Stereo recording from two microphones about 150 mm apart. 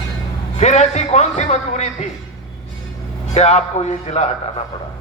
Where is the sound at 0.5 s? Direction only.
50° left (ahead or behind).